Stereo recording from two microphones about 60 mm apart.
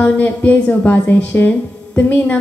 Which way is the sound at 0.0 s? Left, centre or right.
Left.